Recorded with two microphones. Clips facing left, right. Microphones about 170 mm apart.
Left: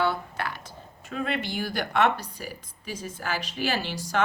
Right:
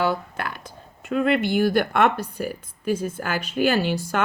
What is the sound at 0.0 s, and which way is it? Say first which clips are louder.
Speech: right 3 dB; 50° right (ahead or behind).